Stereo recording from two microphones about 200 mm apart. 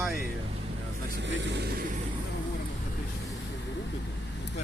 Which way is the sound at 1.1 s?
65° right (ahead or behind).